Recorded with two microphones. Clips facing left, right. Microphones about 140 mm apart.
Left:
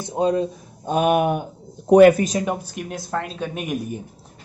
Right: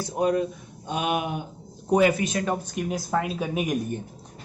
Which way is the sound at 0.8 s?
45° left (ahead or behind).